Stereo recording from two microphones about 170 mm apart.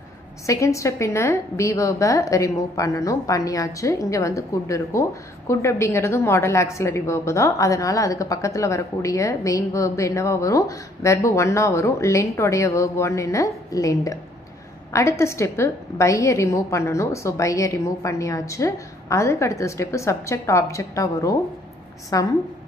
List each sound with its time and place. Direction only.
0.5 s a woman's voice: 20° left (ahead or behind)